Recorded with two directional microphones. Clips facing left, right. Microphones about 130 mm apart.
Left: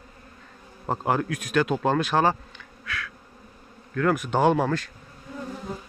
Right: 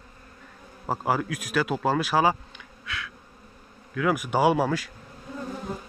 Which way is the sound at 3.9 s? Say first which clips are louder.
Left 1 dB; 10° right (ahead or behind).